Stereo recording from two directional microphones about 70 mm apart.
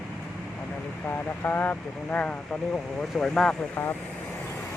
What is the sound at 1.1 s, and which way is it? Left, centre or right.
Speech, left.